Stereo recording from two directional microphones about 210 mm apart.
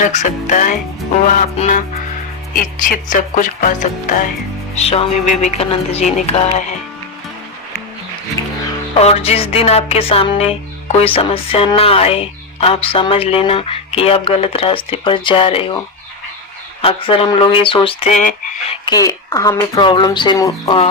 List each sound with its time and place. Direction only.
0.0 s speech: 35° left (ahead or behind)
4.7 s music: 30° left (ahead or behind)
8.4 s music: 15° left (ahead or behind)
9.0 s music: 30° left (ahead or behind)
16.8 s music: 25° left (ahead or behind)
18.9 s speech: 15° left (ahead or behind)